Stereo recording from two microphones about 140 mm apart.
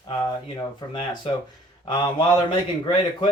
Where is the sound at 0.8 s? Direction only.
30° left (ahead or behind).